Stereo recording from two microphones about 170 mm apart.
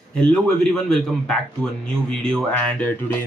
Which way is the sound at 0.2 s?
5° left (ahead or behind).